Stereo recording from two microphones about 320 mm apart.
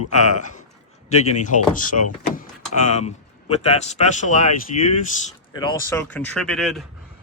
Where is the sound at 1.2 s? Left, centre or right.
Left.